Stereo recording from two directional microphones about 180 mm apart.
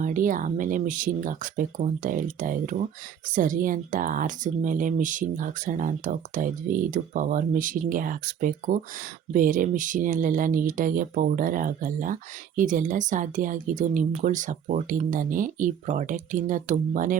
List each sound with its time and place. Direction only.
0.0 s speech: 50° right (ahead or behind)